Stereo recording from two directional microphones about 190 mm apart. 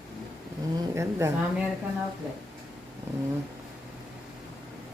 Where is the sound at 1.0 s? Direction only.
15° right (ahead or behind).